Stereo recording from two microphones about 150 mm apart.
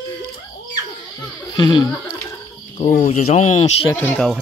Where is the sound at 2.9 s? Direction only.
65° left (ahead or behind); by 3.7 s 45° left (ahead or behind).